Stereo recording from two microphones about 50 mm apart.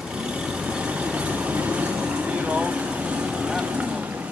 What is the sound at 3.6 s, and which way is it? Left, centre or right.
Boat, right.